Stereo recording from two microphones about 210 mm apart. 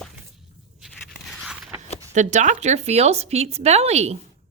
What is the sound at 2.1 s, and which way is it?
Speech, 35° right (ahead or behind).